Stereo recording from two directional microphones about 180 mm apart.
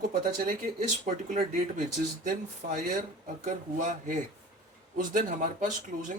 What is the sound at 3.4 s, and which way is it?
Speech, 45° right (ahead or behind).